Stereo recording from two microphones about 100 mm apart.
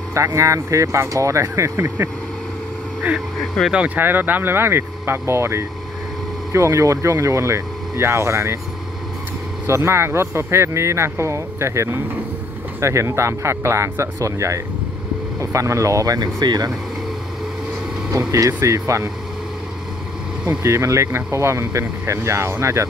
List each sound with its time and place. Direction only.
0.1 s speech: 30° right (ahead or behind)
3.3 s speech: centre (ahead or behind)
3.7 s speech: 15° right (ahead or behind)
9.7 s speech: 25° right (ahead or behind)
18.6 s speech: 30° right (ahead or behind)
20.6 s speech: 30° right (ahead or behind)